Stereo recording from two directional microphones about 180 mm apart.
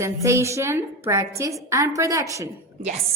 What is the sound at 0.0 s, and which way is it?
A woman's voice, 15° right (ahead or behind).